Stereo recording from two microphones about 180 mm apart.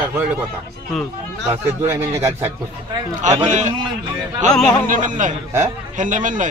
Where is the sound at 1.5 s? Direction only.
15° right (ahead or behind).